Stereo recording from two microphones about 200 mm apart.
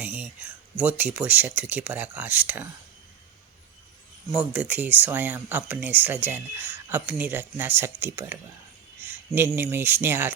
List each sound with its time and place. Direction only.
0.0 s speech: 10° right (ahead or behind)
4.3 s speech: 5° right (ahead or behind)
9.0 s a sound: 10° right (ahead or behind)
9.6 s speech: 10° right (ahead or behind)